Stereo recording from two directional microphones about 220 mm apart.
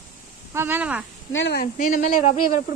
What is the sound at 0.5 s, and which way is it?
Speech, 10° right (ahead or behind).